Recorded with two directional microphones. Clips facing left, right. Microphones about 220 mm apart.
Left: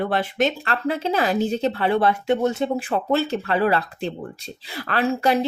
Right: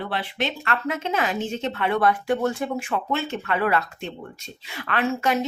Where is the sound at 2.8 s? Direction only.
35° left (ahead or behind).